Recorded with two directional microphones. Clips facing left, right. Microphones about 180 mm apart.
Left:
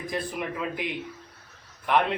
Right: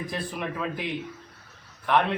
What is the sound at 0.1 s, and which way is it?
Speech, 15° left (ahead or behind).